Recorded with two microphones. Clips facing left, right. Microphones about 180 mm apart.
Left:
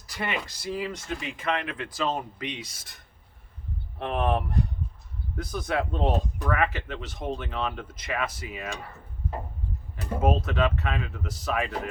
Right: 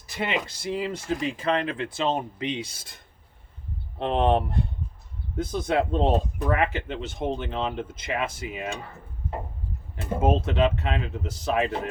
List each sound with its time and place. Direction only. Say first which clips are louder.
0.1 s speech: right 3 dB; 25° right (ahead or behind)
10.0 s speech: right 2 dB; 25° right (ahead or behind)